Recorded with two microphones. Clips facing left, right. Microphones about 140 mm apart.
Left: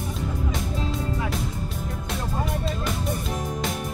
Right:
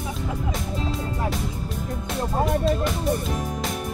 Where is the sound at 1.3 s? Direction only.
Centre (ahead or behind).